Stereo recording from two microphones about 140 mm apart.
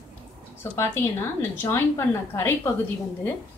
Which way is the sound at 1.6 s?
25° left (ahead or behind).